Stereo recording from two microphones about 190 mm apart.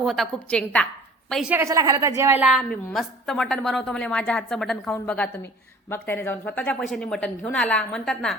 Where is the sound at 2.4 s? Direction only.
5° left (ahead or behind).